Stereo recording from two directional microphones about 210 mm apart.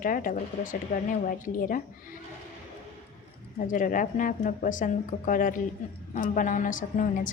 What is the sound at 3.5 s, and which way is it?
A woman's voice, 40° left (ahead or behind).